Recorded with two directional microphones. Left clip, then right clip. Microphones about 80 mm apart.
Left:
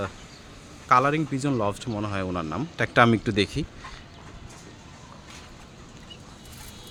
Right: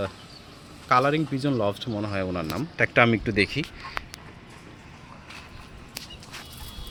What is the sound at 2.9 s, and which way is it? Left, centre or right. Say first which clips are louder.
Speech: left 2 dB; left.